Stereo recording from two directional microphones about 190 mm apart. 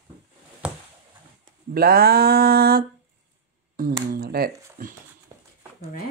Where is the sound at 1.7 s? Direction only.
55° right (ahead or behind).